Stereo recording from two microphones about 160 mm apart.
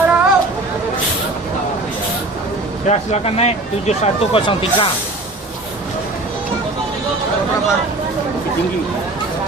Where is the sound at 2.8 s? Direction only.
40° left (ahead or behind).